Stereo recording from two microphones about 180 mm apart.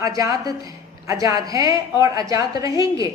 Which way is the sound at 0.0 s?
20° right (ahead or behind).